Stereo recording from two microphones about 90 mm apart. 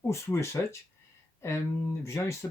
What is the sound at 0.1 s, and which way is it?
Speech, 30° left (ahead or behind).